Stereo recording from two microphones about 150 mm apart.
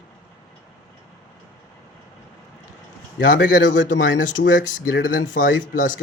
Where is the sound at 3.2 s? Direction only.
65° left (ahead or behind).